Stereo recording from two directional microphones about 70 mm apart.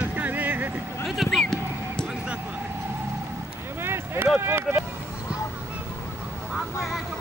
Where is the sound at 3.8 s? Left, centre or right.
Right.